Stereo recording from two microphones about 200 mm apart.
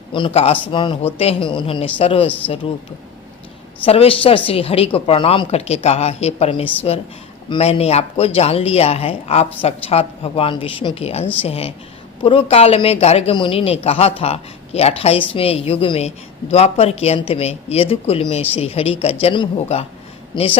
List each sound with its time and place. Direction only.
0.1 s speech: 25° left (ahead or behind)
3.8 s speech: 30° left (ahead or behind)